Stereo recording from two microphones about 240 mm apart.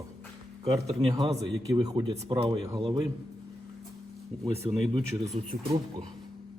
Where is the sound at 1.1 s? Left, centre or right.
Right.